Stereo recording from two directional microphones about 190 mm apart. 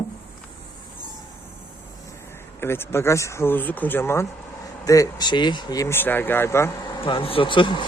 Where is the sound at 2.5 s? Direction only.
10° left (ahead or behind).